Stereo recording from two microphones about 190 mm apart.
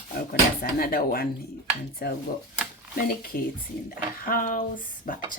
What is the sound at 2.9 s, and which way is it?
Speech, 50° left (ahead or behind).